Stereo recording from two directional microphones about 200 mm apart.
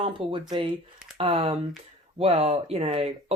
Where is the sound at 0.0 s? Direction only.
25° right (ahead or behind).